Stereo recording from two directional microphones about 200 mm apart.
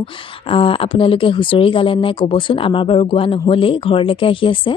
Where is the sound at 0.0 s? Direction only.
25° left (ahead or behind).